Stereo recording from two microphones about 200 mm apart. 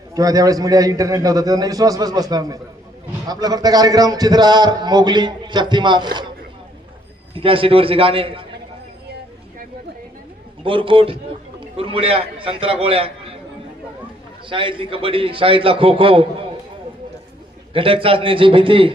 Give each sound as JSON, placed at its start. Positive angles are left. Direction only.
{"t": 0.1, "sound": "a man's voice", "side_deg": -20}
{"t": 7.3, "sound": "a man's voice", "side_deg": -25}
{"t": 10.6, "sound": "a man's voice", "side_deg": -25}
{"t": 14.5, "sound": "a man's voice", "side_deg": -25}
{"t": 17.7, "sound": "a man's voice", "side_deg": -25}